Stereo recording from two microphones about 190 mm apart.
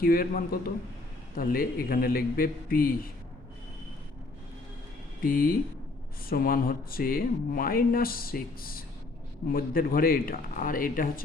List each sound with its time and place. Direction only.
0.0 s speech: 50° left (ahead or behind)
5.2 s speech: 50° left (ahead or behind)